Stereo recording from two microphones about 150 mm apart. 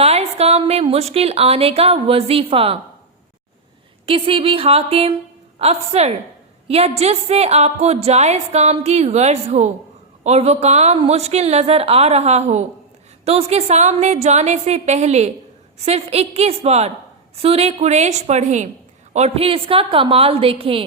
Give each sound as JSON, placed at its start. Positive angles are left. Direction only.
{"t": 0.0, "sound": "a woman's voice", "side_deg": -45}
{"t": 4.0, "sound": "a woman's voice", "side_deg": -40}